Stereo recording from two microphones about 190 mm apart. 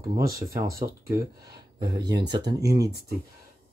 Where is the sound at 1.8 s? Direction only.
20° right (ahead or behind).